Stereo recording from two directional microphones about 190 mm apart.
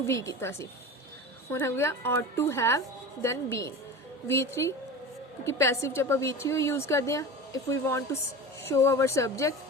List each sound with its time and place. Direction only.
0.1 s a woman's voice: 15° left (ahead or behind)